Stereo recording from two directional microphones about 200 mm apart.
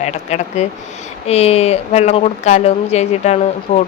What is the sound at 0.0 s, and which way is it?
Speech, 35° left (ahead or behind).